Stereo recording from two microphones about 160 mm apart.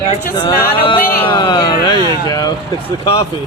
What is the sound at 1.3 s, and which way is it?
A man's voice, 25° left (ahead or behind).